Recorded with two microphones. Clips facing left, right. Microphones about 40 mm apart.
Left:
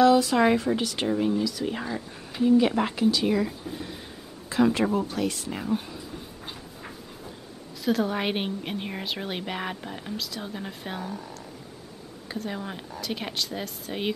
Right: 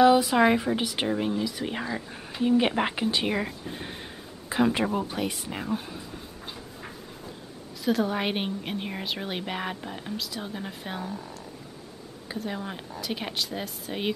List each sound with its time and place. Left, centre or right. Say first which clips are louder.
0.0 s speech: even; centre
6.4 s a sound: even; centre
7.8 s a woman's voice: even; centre